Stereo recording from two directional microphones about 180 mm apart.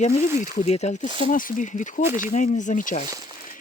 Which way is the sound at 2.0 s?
15° right (ahead or behind).